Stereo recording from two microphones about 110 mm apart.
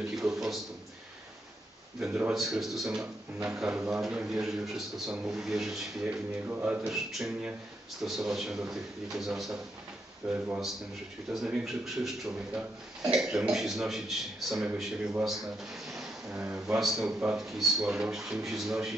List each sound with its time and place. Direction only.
0.3 s a man's voice: 5° right (ahead or behind)
2.1 s a man's voice: 5° right (ahead or behind)
6.0 s a man's voice: 15° right (ahead or behind)
15.7 s a sound: 5° right (ahead or behind)
16.3 s speech: 15° right (ahead or behind)
16.6 s a man's voice: 5° right (ahead or behind)